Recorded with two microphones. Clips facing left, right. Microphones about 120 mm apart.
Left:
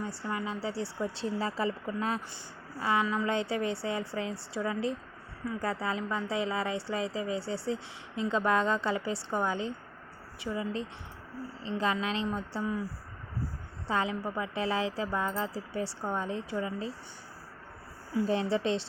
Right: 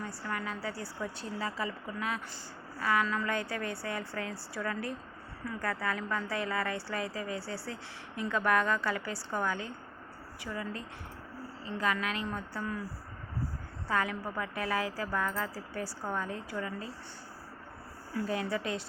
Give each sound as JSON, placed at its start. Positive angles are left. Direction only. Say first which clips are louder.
{"t": 0.0, "sound": "a woman's voice", "louder": "left 3 dB", "side_deg": 30}
{"t": 2.7, "sound": "a woman's voice", "louder": "left 1 dB", "side_deg": 20}
{"t": 13.8, "sound": "a woman's voice", "louder": "left 2 dB", "side_deg": 25}
{"t": 18.3, "sound": "a woman's voice", "louder": "left 5 dB", "side_deg": 30}